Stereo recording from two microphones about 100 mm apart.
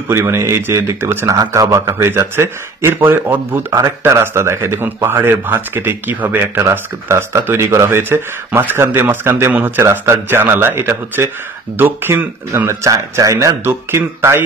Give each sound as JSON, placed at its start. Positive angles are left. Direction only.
{"t": 0.1, "sound": "speech", "side_deg": -25}
{"t": 1.3, "sound": "speech", "side_deg": -35}